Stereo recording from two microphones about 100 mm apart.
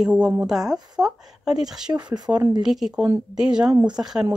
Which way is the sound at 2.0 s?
45° right (ahead or behind).